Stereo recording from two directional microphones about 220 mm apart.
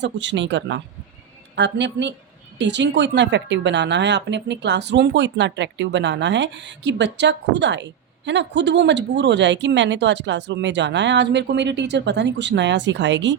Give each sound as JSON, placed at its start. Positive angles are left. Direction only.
{"t": 0.0, "sound": "speech", "side_deg": -55}